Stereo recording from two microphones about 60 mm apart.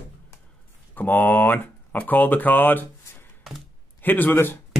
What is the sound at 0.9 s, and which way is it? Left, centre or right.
A man's voice, left.